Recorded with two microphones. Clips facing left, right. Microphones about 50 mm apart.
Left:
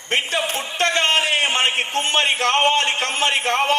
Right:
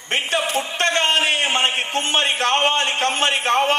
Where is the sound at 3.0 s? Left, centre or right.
Right.